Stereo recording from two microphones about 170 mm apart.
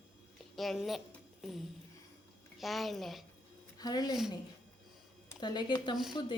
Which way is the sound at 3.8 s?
25° left (ahead or behind).